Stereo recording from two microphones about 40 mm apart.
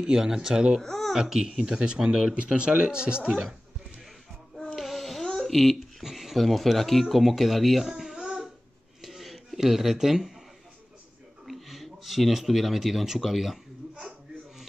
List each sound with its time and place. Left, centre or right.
0.0 s speech: centre
0.7 s speech: centre
1.1 s speech: centre
2.3 s speech: right
4.7 s a sound: centre
6.0 s a sound: centre
6.3 s speech: centre
9.0 s a sound: centre
11.4 s speech: centre